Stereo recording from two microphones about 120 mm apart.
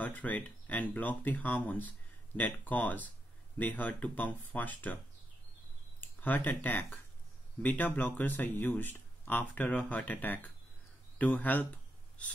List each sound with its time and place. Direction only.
0.0 s speech: 15° left (ahead or behind)
5.9 s speech: 15° left (ahead or behind)
11.1 s a sound: 15° left (ahead or behind)